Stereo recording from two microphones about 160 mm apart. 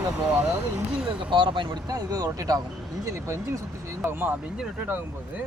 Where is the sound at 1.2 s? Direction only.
30° right (ahead or behind); by 5.0 s 10° right (ahead or behind).